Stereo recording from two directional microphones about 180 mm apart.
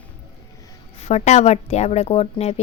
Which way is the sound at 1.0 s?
35° left (ahead or behind).